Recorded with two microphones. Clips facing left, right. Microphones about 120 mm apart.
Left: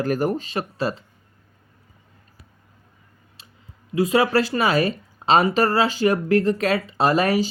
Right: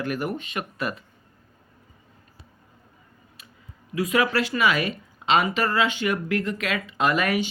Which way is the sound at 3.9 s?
30° left (ahead or behind).